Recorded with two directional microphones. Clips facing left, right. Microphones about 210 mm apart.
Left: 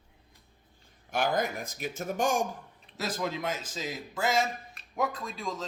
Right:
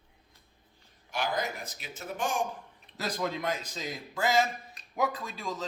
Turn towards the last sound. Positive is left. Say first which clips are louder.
# left 1 dB
turn(degrees=0)  # may be behind; listen again after turning